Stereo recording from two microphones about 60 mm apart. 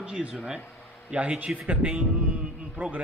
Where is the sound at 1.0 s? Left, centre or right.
Right.